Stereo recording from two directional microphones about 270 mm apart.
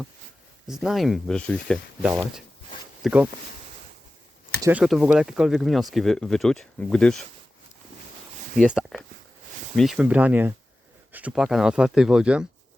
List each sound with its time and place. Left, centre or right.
0.7 s speech: centre
4.6 s speech: centre
8.5 s speech: centre